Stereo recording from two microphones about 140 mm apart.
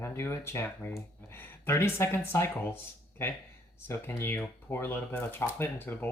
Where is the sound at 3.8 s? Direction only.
15° left (ahead or behind).